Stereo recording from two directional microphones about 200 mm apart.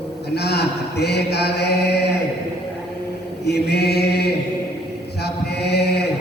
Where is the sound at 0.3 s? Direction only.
55° left (ahead or behind).